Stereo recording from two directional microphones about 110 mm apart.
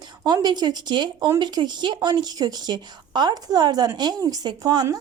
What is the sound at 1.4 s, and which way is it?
Speech, 40° right (ahead or behind).